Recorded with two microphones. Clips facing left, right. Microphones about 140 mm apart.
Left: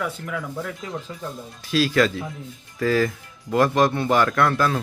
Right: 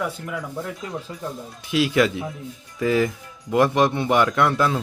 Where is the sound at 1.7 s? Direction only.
20° right (ahead or behind).